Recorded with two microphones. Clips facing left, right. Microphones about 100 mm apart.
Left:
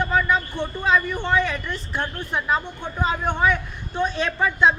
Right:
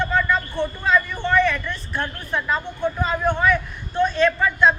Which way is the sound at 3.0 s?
20° left (ahead or behind).